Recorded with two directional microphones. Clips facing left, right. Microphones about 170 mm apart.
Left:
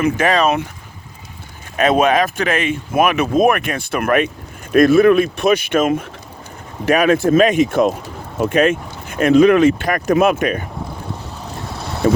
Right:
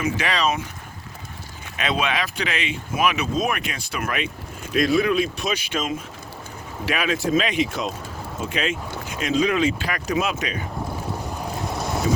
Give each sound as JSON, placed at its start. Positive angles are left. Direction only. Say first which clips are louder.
{"t": 0.0, "sound": "speech", "louder": "left 8 dB", "side_deg": 50}
{"t": 1.7, "sound": "speech", "louder": "left 11 dB", "side_deg": 45}
{"t": 12.0, "sound": "speech", "louder": "left 10 dB", "side_deg": 60}